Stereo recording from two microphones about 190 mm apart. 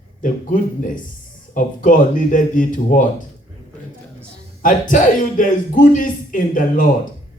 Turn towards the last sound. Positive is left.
turn(degrees=45)  # may be behind; listen again after turning